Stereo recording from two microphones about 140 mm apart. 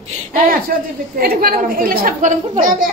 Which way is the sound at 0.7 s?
90° right.